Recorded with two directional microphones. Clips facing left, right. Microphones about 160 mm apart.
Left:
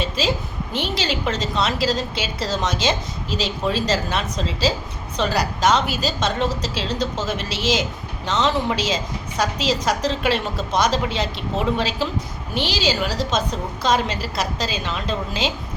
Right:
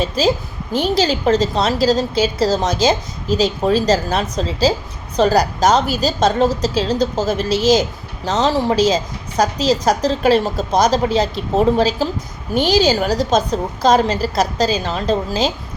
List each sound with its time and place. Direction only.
0.0 s a woman's voice: 40° right (ahead or behind)